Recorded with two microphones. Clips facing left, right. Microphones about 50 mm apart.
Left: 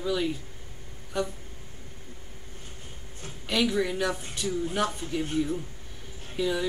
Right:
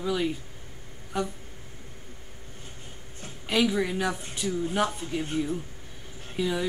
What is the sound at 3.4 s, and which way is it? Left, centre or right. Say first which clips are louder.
Speech: right 1 dB; centre.